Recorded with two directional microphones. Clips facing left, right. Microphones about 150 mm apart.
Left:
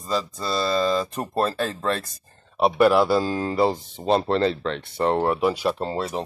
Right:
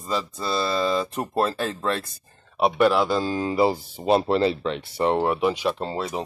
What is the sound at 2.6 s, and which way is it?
Speech, 5° left (ahead or behind).